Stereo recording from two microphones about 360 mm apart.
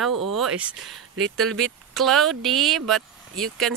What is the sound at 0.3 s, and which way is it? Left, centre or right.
Speech, centre.